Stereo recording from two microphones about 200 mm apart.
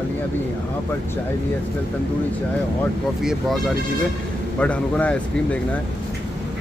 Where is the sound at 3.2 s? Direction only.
Centre (ahead or behind).